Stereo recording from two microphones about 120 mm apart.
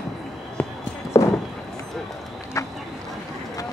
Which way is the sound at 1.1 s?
25° left (ahead or behind).